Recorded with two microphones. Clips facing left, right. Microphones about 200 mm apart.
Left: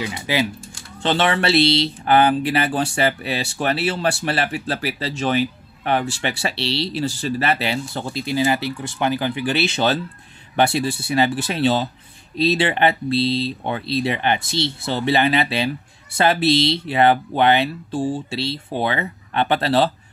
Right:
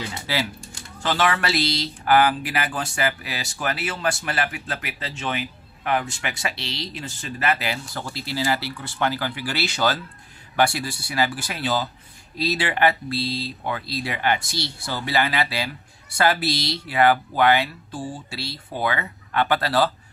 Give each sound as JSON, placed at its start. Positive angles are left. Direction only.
{"t": 0.0, "sound": "speech", "side_deg": 20}